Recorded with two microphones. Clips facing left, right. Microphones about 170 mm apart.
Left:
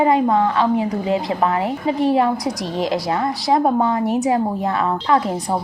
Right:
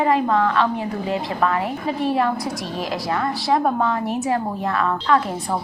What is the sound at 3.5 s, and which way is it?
A woman's voice, 20° left (ahead or behind).